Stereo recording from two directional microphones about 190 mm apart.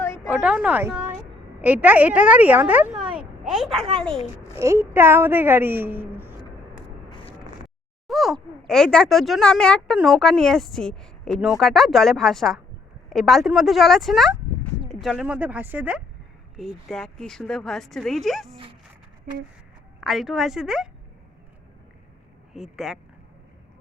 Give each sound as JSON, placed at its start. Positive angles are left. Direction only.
{"t": 0.3, "sound": "a woman's voice", "side_deg": -5}
{"t": 4.5, "sound": "a woman's voice", "side_deg": -15}
{"t": 7.1, "sound": "a sound", "side_deg": 25}
{"t": 8.0, "sound": "a woman's voice", "side_deg": 0}
{"t": 20.0, "sound": "speech", "side_deg": 0}
{"t": 22.5, "sound": "speech", "side_deg": 0}